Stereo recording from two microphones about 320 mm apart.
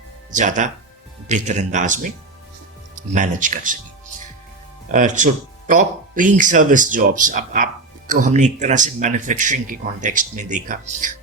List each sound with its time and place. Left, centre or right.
0.3 s speech: right
4.9 s speech: right